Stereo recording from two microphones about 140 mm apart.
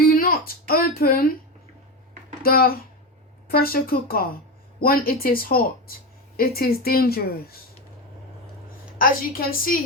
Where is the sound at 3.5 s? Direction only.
90° left.